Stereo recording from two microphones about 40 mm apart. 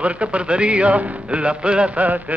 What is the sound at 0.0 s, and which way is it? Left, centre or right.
A man's voice, right.